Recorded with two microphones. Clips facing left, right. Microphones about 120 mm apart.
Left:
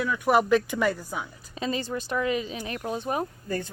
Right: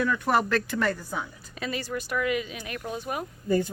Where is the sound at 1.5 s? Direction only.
25° left (ahead or behind).